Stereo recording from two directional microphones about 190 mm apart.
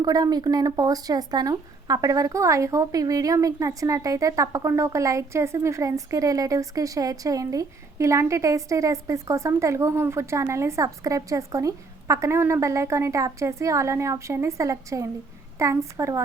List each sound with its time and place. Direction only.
0.0 s speech: 20° right (ahead or behind)